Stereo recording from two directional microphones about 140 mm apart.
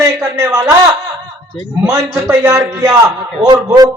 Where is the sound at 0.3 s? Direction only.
20° right (ahead or behind).